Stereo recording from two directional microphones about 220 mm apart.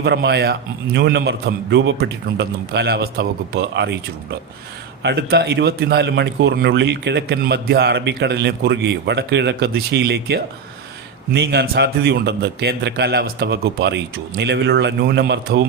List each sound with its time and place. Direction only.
0.0 s a man's voice: 50° right (ahead or behind)
5.0 s a man's voice: 50° right (ahead or behind)